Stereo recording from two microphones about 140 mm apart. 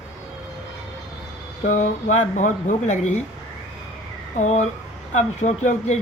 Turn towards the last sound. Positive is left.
turn(degrees=55)  # may be behind; listen again after turning